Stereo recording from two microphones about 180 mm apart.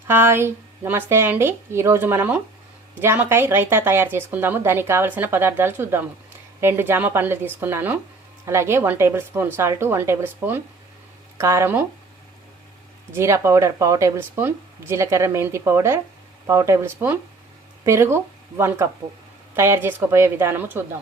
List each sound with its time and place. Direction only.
0.1 s speech: 15° right (ahead or behind)
13.1 s speech: 15° right (ahead or behind)